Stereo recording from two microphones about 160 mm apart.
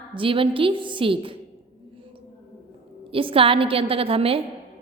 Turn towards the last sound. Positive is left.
turn(degrees=-35)  # may be behind; listen again after turning